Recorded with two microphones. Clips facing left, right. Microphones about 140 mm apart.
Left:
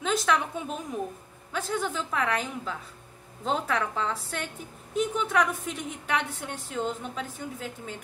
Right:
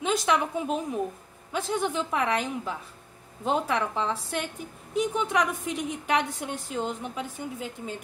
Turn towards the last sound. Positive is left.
turn(degrees=-20)  # may be behind; listen again after turning